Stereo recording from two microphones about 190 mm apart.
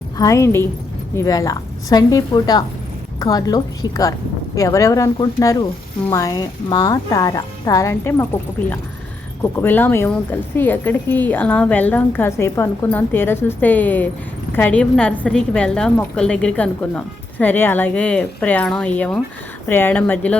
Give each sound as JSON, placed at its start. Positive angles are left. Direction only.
{"t": 0.2, "sound": "a woman's voice", "side_deg": 15}